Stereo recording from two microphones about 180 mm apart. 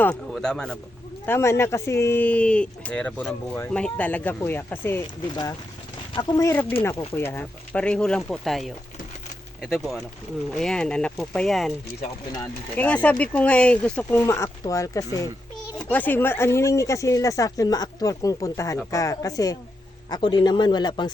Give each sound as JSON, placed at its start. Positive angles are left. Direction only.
{"t": 0.0, "sound": "a man's voice", "side_deg": 5}
{"t": 12.7, "sound": "a man's voice", "side_deg": 5}